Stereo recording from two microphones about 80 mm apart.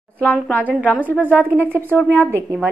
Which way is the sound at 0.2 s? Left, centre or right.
Centre.